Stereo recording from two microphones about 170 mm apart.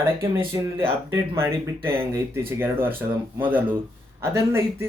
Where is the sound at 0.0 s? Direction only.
15° right (ahead or behind).